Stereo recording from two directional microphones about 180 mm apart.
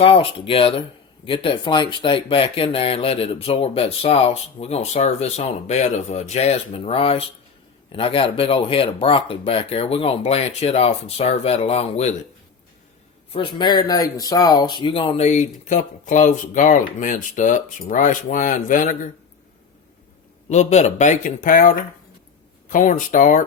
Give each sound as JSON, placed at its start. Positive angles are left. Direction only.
{"t": 0.0, "sound": "speech", "side_deg": 30}
{"t": 13.3, "sound": "speech", "side_deg": 25}
{"t": 20.5, "sound": "speech", "side_deg": 40}